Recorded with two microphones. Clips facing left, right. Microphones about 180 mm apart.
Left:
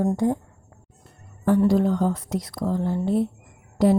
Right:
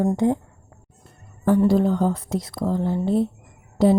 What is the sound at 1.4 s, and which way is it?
Speech, 30° right (ahead or behind).